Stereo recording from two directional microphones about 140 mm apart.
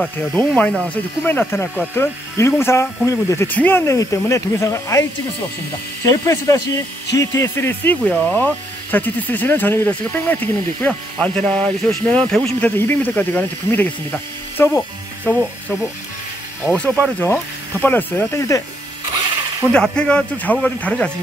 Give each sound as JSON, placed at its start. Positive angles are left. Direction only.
{"t": 0.0, "sound": "speech", "side_deg": 10}
{"t": 6.0, "sound": "speech", "side_deg": 20}
{"t": 16.6, "sound": "speech", "side_deg": 10}
{"t": 19.7, "sound": "speech", "side_deg": 5}